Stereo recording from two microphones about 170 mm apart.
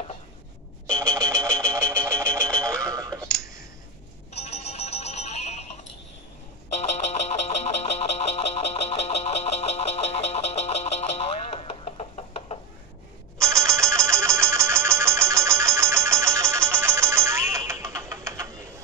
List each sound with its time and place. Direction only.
0.9 s a sound: 20° right (ahead or behind)
2.0 s music: 15° right (ahead or behind)
4.4 s music: 40° left (ahead or behind)
6.7 s a sound: 40° left (ahead or behind)
13.4 s ringtone: 15° right (ahead or behind)
14.5 s music: 15° right (ahead or behind)